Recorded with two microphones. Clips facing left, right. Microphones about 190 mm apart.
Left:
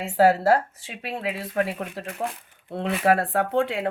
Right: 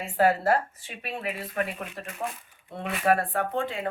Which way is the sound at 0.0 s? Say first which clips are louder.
Left 4 dB; 85° left.